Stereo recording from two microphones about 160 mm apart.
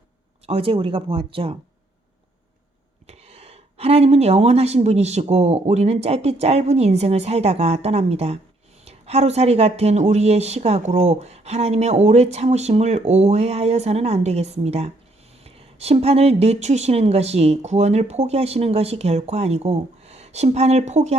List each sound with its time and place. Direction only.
0.4 s a woman's voice: 35° right (ahead or behind)
3.1 s a woman's voice: 40° right (ahead or behind)